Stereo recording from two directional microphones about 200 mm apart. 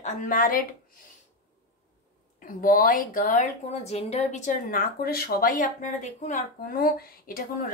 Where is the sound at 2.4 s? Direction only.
45° left (ahead or behind).